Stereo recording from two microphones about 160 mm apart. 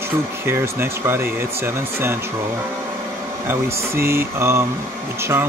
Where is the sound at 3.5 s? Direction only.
15° right (ahead or behind).